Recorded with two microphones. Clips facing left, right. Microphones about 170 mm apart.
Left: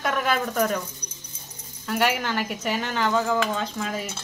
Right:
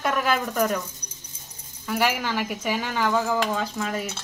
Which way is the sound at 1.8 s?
Centre (ahead or behind).